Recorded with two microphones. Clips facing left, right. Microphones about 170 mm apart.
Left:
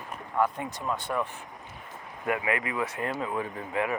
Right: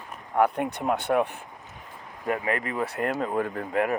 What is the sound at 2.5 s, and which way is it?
Speech, 40° right (ahead or behind).